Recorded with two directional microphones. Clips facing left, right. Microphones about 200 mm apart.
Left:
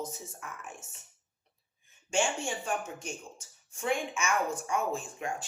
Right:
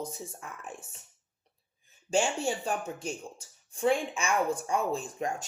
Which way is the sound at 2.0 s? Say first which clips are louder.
Right 3 dB; 35° right (ahead or behind).